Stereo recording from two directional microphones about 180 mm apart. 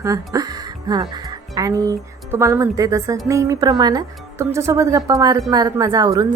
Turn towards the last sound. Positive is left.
turn(degrees=-20)  # may be behind; listen again after turning